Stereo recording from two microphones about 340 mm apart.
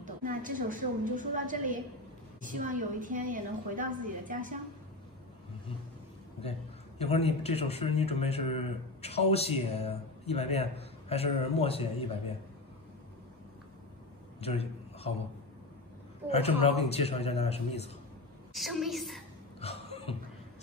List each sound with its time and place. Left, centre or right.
0.0 s a woman's voice: right
7.0 s speech: centre
14.4 s a sound: centre
16.3 s speech: centre
18.5 s a woman's voice: centre
19.6 s a sound: centre